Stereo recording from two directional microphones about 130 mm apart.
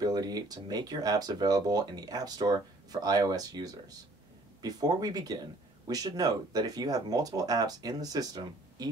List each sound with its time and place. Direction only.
0.0 s speech: 30° right (ahead or behind)